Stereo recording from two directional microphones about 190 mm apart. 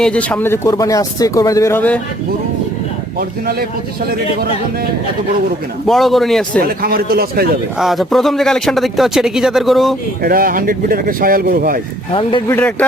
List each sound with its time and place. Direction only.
0.0 s speech: 5° left (ahead or behind)
3.2 s speech: 50° right (ahead or behind)
5.9 s speech: centre (ahead or behind)
6.6 s speech: 50° right (ahead or behind)
7.8 s speech: centre (ahead or behind)
10.2 s speech: 50° right (ahead or behind)
12.5 s speech: 10° left (ahead or behind)